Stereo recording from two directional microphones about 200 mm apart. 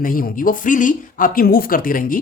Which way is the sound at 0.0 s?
45° left (ahead or behind).